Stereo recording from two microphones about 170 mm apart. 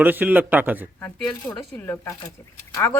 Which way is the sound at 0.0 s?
10° right (ahead or behind).